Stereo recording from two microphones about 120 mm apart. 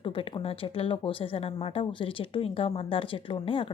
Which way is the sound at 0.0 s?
50° left (ahead or behind).